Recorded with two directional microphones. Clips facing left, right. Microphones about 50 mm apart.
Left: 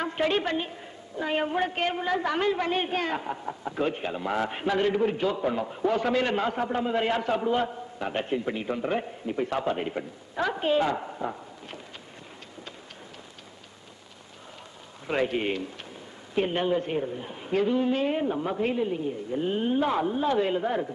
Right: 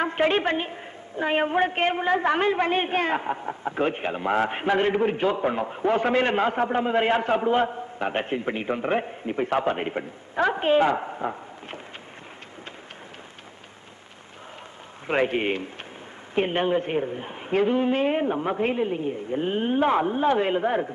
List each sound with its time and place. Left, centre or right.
0.0 s a woman's voice: right
15.0 s a woman's voice: right